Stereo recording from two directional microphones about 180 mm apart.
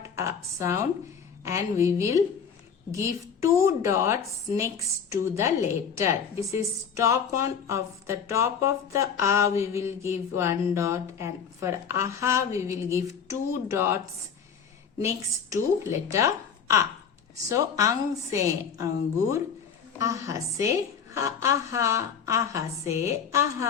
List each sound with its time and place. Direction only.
0.2 s a woman's voice: 15° right (ahead or behind)
15.0 s a woman's voice: 15° right (ahead or behind)